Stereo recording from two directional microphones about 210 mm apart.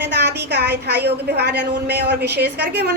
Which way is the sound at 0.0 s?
55° right (ahead or behind).